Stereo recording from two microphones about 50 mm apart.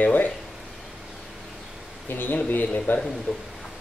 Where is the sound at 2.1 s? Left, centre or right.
Left.